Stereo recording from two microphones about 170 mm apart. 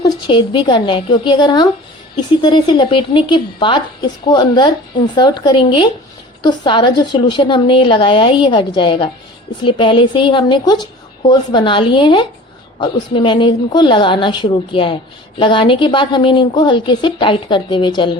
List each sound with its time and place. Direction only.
0.0 s speech: 30° left (ahead or behind)